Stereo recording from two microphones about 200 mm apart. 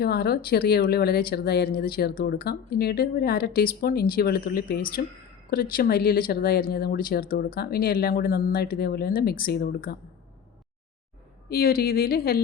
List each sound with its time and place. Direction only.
0.0 s speech: 50° left (ahead or behind)
11.4 s speech: 50° left (ahead or behind)